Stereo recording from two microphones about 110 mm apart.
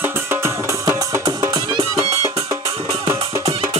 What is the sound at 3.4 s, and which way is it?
Music, 60° right (ahead or behind).